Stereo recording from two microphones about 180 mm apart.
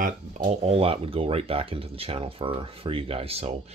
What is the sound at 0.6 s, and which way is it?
Speech, 35° right (ahead or behind).